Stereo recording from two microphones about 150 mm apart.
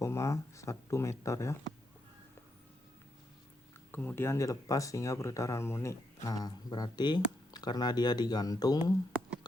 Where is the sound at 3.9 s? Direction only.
10° left (ahead or behind).